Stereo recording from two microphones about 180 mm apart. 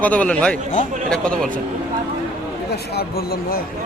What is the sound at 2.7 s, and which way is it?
Speech, 60° left (ahead or behind).